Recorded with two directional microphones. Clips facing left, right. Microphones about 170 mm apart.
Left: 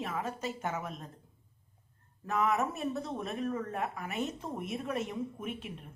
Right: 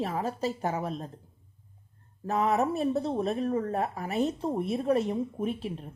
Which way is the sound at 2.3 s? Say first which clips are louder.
Right 4 dB; 35° right (ahead or behind).